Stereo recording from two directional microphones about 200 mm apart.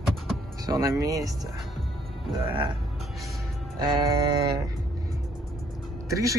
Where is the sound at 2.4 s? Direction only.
25° right (ahead or behind).